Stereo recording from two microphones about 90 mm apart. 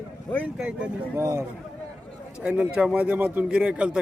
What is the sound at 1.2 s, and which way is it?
Speech, 30° right (ahead or behind).